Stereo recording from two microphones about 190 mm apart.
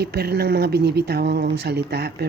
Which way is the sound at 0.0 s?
55° right (ahead or behind).